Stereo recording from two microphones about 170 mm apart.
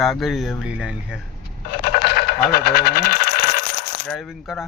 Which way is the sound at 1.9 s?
65° left (ahead or behind).